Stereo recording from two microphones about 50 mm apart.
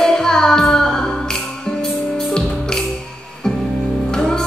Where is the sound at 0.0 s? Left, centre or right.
Centre.